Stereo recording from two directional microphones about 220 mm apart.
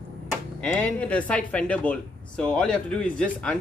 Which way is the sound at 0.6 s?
5° left (ahead or behind).